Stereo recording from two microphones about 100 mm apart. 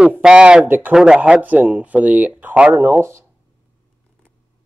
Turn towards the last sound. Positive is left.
turn(degrees=-25)  # may be behind; listen again after turning